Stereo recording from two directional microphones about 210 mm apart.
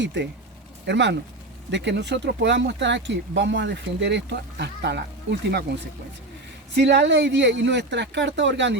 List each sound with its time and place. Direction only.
0.0 s speech: 60° right (ahead or behind)
6.7 s speech: 55° right (ahead or behind)